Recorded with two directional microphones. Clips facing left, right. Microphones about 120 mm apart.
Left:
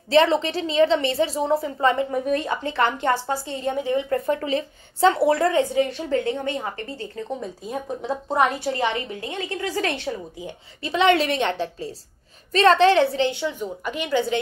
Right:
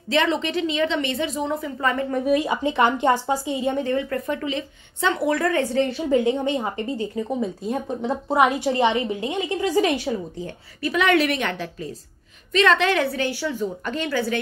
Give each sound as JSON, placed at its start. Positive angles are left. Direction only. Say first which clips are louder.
{"t": 0.1, "sound": "a woman's voice", "louder": "left 3 dB", "side_deg": 35}
{"t": 2.2, "sound": "a woman's voice", "louder": "right 3 dB", "side_deg": -10}
{"t": 3.7, "sound": "a woman's voice", "louder": "left 1 dB", "side_deg": 15}
{"t": 6.0, "sound": "a woman's voice", "louder": "right 4 dB", "side_deg": -15}
{"t": 10.8, "sound": "a woman's voice", "louder": "left 1 dB", "side_deg": 25}